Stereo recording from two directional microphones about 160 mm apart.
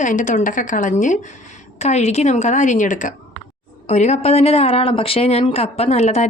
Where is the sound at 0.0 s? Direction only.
50° left (ahead or behind).